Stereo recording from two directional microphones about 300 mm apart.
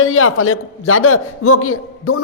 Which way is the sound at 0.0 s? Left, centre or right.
Left.